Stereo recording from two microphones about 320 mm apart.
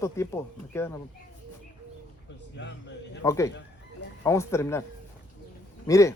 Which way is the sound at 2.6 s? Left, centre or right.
Left.